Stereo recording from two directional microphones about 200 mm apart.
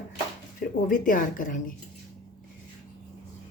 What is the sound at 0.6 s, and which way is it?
Speech, 40° left (ahead or behind).